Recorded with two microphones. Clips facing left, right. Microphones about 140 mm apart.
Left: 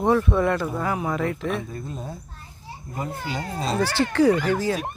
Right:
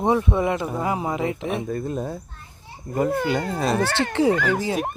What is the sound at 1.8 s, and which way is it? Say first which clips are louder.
Speech: right 7 dB; 60° right (ahead or behind).